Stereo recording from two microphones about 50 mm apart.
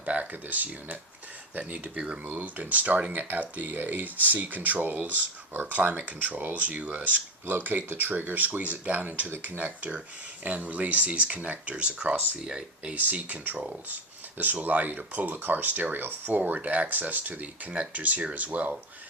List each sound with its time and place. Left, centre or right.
0.0 s speech: right
12.9 s speech: right